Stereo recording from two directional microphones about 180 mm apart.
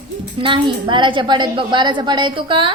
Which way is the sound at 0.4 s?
25° right (ahead or behind).